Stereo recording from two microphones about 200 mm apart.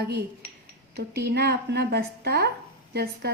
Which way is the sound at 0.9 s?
55° right (ahead or behind).